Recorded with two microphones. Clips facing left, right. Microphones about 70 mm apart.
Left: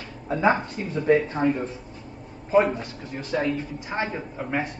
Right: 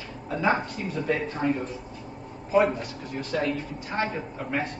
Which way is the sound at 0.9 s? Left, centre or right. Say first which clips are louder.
Left 8 dB; left.